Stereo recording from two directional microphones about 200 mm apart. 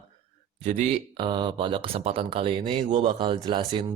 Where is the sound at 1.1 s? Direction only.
25° right (ahead or behind).